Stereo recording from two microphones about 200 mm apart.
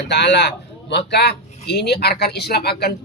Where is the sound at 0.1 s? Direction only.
60° left (ahead or behind).